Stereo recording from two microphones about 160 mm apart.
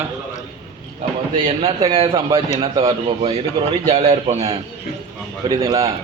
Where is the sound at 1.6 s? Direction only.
35° right (ahead or behind).